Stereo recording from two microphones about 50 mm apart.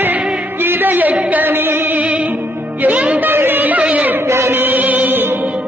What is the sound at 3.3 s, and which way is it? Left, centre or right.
Music, right.